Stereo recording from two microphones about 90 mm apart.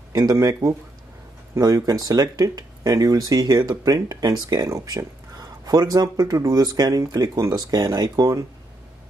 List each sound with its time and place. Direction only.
0.1 s speech: 40° right (ahead or behind)